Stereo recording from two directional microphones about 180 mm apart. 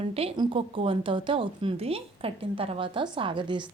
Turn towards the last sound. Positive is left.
turn(degrees=-25)  # may be behind; listen again after turning